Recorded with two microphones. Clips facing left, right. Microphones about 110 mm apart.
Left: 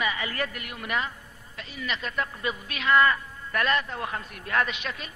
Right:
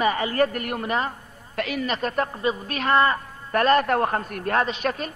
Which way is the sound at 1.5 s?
70° right (ahead or behind).